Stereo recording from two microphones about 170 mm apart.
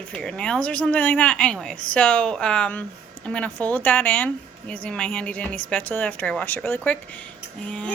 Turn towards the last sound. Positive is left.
turn(degrees=5)  # may be behind; listen again after turning